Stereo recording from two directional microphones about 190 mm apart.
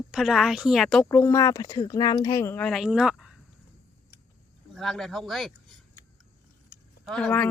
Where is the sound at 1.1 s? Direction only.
15° left (ahead or behind); by 3.4 s 5° right (ahead or behind).